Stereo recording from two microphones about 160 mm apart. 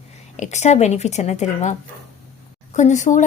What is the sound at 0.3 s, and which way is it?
Speech, 45° left (ahead or behind).